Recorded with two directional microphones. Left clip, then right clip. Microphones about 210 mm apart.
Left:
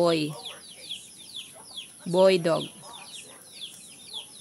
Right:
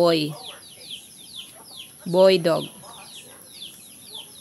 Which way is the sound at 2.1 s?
Centre (ahead or behind).